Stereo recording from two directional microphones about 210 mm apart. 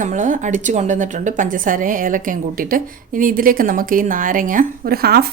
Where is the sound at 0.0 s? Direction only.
35° right (ahead or behind).